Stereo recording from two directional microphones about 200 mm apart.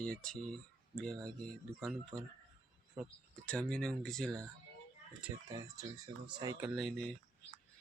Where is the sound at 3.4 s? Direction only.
5° left (ahead or behind).